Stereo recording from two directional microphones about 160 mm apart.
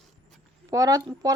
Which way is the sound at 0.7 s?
20° right (ahead or behind).